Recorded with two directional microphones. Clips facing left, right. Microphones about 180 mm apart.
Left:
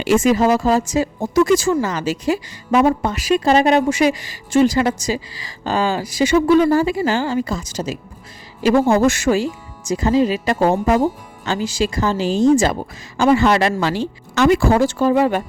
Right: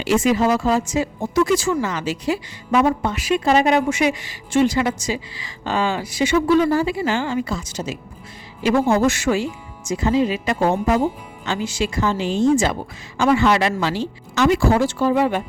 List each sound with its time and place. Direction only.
0.0 s speech: 50° left (ahead or behind)